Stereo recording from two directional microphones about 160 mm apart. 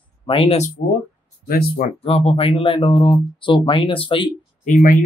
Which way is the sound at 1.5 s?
70° left (ahead or behind).